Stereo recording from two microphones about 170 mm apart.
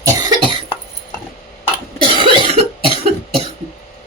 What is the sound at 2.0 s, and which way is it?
Cough, 30° right (ahead or behind).